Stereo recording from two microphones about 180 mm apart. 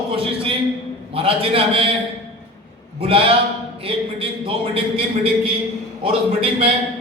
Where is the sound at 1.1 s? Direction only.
30° right (ahead or behind).